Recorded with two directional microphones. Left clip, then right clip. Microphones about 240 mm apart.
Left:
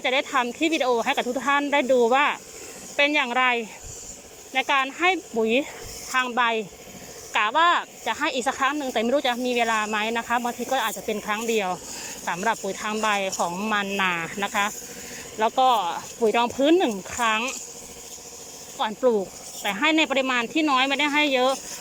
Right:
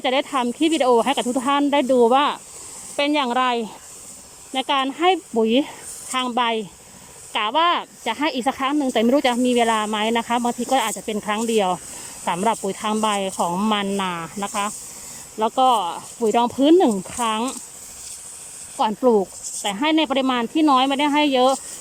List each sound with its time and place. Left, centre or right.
0.0 s speech: right
18.8 s speech: right